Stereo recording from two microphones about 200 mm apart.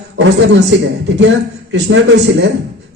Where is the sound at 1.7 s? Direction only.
60° right (ahead or behind).